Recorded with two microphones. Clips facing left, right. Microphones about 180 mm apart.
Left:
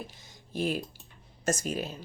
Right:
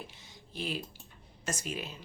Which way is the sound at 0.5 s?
45° left (ahead or behind).